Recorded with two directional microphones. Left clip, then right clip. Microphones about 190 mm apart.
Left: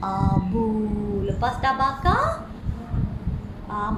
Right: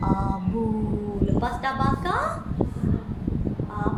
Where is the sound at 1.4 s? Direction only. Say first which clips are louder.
Left 6 dB; 10° left (ahead or behind).